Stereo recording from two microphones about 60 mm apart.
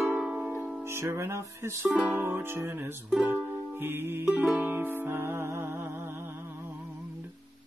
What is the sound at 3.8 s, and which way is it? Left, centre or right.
Music, right.